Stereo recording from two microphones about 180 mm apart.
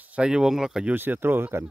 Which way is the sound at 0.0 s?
5° right (ahead or behind).